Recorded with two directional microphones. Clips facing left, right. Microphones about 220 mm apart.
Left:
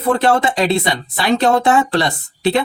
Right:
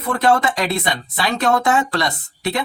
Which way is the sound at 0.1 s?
30° left (ahead or behind).